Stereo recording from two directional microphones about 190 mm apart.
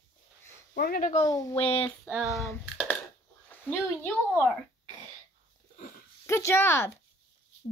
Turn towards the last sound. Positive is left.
turn(degrees=15)  # may be behind; listen again after turning